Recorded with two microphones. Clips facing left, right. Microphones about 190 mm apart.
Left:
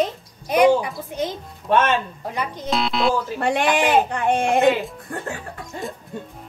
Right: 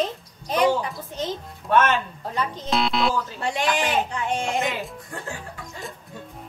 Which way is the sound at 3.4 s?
60° left (ahead or behind).